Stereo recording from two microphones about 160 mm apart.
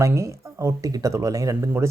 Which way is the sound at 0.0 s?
20° right (ahead or behind).